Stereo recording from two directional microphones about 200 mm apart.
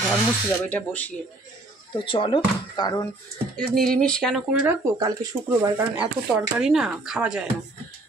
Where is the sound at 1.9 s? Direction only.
25° left (ahead or behind).